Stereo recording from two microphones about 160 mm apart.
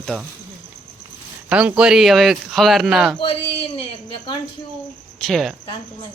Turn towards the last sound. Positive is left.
turn(degrees=0)  # may be behind; listen again after turning